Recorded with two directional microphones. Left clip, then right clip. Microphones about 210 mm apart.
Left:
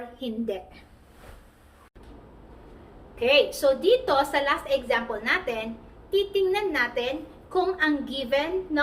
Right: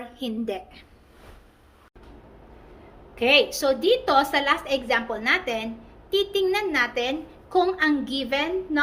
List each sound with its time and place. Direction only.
0.2 s a woman's voice: 45° right (ahead or behind)
3.2 s a woman's voice: 50° right (ahead or behind)